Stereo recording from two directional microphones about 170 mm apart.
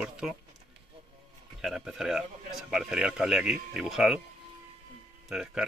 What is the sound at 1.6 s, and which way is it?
Speech, centre (ahead or behind).